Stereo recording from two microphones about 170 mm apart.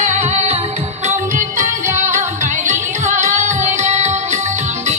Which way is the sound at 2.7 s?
45° right (ahead or behind).